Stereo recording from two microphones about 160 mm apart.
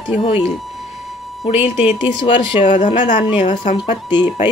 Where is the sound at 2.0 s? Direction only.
30° left (ahead or behind).